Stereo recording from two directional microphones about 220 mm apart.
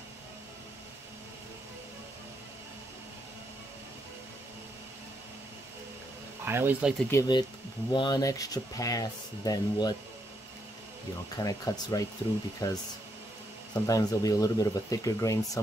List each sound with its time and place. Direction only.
6.4 s speech: 10° right (ahead or behind)
7.1 s speech: 15° left (ahead or behind)
11.3 s speech: 15° left (ahead or behind)
13.8 s speech: 15° left (ahead or behind)